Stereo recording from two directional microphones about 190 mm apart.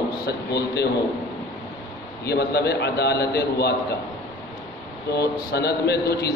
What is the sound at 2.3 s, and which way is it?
A man's voice, 60° left (ahead or behind).